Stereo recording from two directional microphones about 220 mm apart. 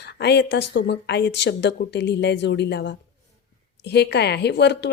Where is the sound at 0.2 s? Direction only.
50° left (ahead or behind).